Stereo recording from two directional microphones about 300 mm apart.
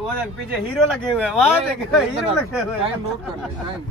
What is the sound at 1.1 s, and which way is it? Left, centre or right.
Speech, centre.